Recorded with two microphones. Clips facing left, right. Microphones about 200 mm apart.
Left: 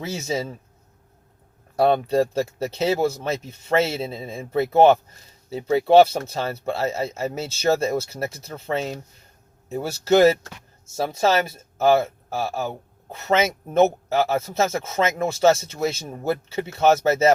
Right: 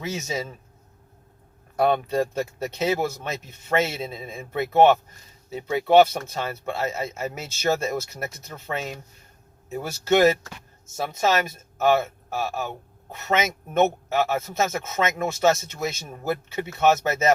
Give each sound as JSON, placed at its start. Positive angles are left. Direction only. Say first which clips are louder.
{"t": 0.0, "sound": "speech", "louder": "left 3 dB", "side_deg": 30}
{"t": 1.7, "sound": "speech", "louder": "left 3 dB", "side_deg": 30}